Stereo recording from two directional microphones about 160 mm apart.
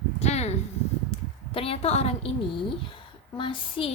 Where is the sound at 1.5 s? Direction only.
35° left (ahead or behind).